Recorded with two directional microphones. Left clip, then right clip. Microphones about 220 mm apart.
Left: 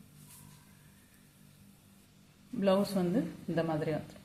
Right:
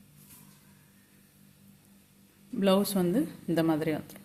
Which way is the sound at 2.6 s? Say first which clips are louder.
Right 3 dB; 45° right (ahead or behind).